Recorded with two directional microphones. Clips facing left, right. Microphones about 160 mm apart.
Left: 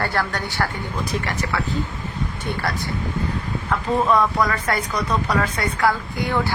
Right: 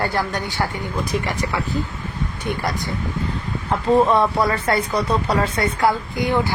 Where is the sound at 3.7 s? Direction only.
30° right (ahead or behind).